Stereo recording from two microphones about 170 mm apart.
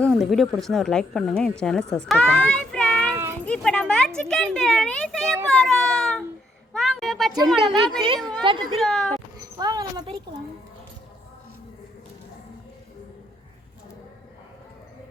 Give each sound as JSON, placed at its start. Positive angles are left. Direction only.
{"t": 0.1, "sound": "a woman's voice", "side_deg": 0}
{"t": 2.4, "sound": "a sound", "side_deg": 5}
{"t": 3.4, "sound": "a woman's voice", "side_deg": 5}
{"t": 6.7, "sound": "a sound", "side_deg": 0}
{"t": 7.5, "sound": "a woman's voice", "side_deg": 0}
{"t": 9.6, "sound": "speech", "side_deg": -25}